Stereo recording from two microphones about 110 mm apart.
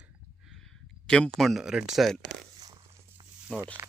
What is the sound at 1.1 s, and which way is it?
Speech, 5° left (ahead or behind).